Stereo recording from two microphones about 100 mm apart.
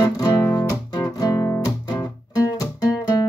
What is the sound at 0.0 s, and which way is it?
Music, 35° left (ahead or behind).